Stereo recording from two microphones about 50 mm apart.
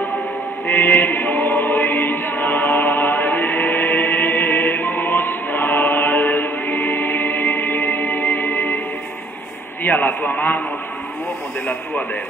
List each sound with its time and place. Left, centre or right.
0.7 s choir: left
9.8 s a man's voice: left